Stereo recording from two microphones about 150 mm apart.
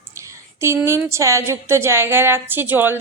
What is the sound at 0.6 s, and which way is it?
A woman's voice, 20° right (ahead or behind).